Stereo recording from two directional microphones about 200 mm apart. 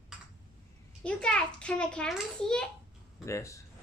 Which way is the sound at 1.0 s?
5° left (ahead or behind).